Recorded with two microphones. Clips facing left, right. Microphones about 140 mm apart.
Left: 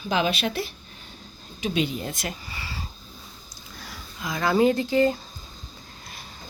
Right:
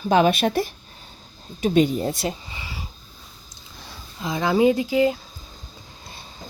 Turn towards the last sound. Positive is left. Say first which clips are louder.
# right 1 dB
turn(degrees=-10)  # may be behind; listen again after turning